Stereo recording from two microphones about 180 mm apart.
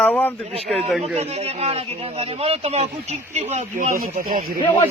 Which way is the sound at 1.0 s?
35° right (ahead or behind).